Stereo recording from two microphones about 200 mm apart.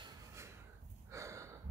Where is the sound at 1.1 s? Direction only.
15° right (ahead or behind).